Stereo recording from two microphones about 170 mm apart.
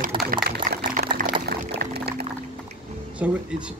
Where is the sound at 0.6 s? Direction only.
50° right (ahead or behind).